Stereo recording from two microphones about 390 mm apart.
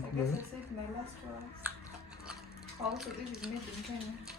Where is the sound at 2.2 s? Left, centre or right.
Centre.